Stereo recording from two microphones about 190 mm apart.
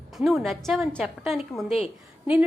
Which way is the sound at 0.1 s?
Centre (ahead or behind).